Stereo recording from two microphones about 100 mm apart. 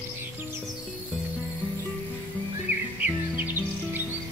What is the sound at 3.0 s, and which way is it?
Music, 20° right (ahead or behind).